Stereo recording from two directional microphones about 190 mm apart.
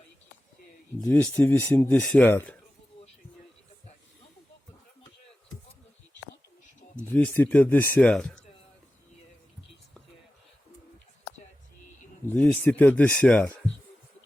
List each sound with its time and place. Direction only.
1.0 s speech: 5° left (ahead or behind)
7.1 s speech: 10° left (ahead or behind)
12.3 s speech: 10° left (ahead or behind)